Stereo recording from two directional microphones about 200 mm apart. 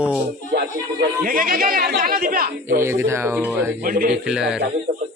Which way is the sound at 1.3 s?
45° right (ahead or behind).